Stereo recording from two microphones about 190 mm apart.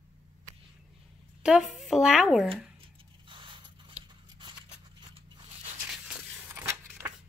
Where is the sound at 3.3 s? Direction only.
25° right (ahead or behind).